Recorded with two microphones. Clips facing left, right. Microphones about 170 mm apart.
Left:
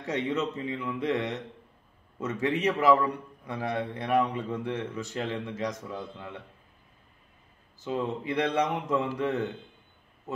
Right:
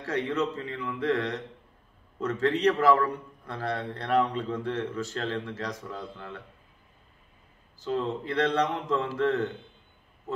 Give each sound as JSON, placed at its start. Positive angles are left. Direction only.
{"t": 0.0, "sound": "a man's voice", "side_deg": 20}
{"t": 7.8, "sound": "a man's voice", "side_deg": 15}